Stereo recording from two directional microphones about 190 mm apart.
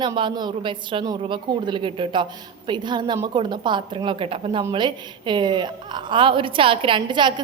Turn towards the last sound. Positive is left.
turn(degrees=-25)  # may be behind; listen again after turning